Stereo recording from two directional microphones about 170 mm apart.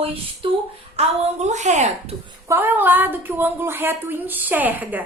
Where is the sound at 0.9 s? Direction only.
45° right (ahead or behind).